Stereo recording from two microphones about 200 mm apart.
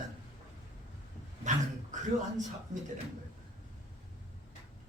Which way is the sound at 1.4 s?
40° right (ahead or behind).